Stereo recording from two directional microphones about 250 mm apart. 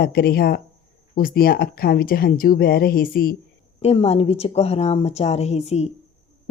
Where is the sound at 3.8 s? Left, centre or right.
Left.